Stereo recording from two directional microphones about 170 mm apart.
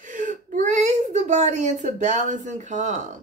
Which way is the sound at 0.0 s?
50° right (ahead or behind).